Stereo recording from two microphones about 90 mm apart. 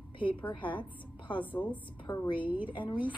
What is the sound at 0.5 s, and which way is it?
Speech, 65° left (ahead or behind).